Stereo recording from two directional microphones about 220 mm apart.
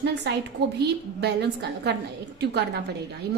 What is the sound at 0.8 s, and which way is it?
A woman's voice, 50° right (ahead or behind).